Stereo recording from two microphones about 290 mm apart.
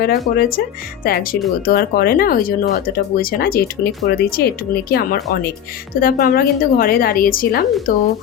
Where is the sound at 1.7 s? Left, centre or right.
Left.